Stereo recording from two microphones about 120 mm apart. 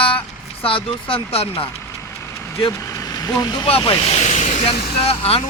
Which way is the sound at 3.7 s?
45° left (ahead or behind).